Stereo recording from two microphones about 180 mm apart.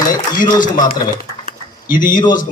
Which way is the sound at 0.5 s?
25° left (ahead or behind).